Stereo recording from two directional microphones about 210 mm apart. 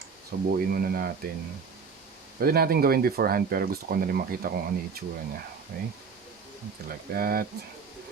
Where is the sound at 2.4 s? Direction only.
45° right (ahead or behind).